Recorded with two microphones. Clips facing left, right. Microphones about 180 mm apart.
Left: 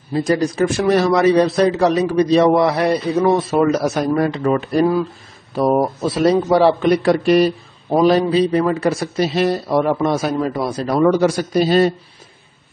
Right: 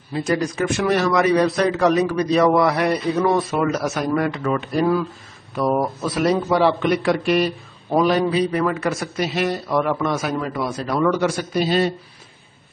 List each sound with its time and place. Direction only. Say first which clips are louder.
0.1 s a man's voice: left 4 dB; 30° left (ahead or behind)